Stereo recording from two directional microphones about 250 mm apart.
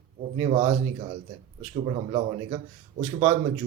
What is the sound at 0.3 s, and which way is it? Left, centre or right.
Speech, right.